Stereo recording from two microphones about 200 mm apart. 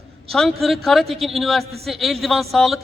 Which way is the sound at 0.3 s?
Centre (ahead or behind).